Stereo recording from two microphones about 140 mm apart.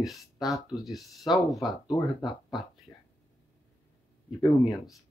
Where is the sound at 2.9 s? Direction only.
20° left (ahead or behind).